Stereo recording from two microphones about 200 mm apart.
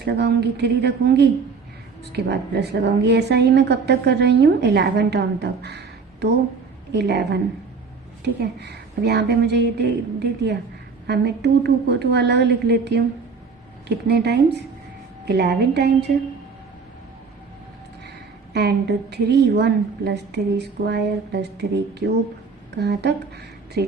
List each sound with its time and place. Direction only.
0.0 s a woman's voice: 55° right (ahead or behind)
18.5 s a woman's voice: 55° right (ahead or behind)